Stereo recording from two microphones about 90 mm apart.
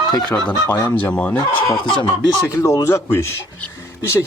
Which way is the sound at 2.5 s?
35° left (ahead or behind).